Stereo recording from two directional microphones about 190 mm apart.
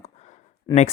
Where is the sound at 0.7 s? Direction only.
20° left (ahead or behind).